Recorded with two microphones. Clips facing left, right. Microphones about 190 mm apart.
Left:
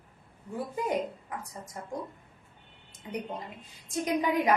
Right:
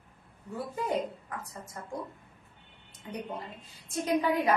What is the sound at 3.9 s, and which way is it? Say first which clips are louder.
Speech: even; 15° left (ahead or behind).